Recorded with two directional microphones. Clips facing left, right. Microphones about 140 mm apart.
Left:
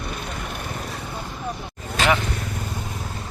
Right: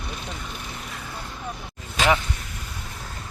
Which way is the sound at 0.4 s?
55° left (ahead or behind).